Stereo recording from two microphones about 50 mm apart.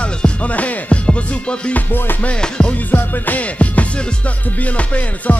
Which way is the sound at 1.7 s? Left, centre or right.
Left.